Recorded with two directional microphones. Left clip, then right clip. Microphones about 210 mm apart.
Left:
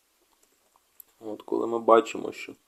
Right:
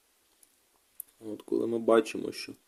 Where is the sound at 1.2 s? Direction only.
55° right (ahead or behind).